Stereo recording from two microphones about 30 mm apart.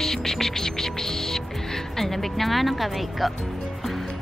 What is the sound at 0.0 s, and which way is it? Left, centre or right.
Music, centre.